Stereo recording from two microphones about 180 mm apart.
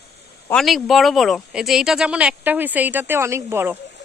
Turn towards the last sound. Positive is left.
turn(degrees=-15)  # may be behind; listen again after turning